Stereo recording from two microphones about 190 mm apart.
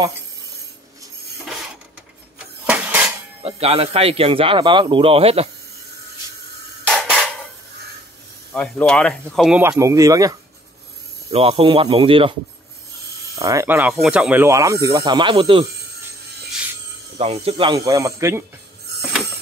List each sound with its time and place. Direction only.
2.3 s vehicle: 5° right (ahead or behind)
3.4 s a man's voice: 30° right (ahead or behind)
6.9 s a sound: centre (ahead or behind)
8.5 s speech: 5° left (ahead or behind)
9.6 s speech: 15° right (ahead or behind)
11.3 s speech: 30° right (ahead or behind)
13.4 s speech: 15° right (ahead or behind)
17.2 s speech: 30° right (ahead or behind)